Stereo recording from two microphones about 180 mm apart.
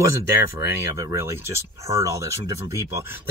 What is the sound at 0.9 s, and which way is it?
Speech, 15° right (ahead or behind).